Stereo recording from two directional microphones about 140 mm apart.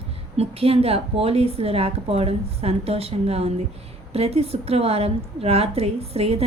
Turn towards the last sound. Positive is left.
turn(degrees=-45)  # may be behind; listen again after turning